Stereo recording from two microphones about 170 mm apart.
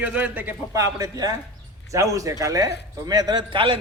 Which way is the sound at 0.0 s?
10° right (ahead or behind).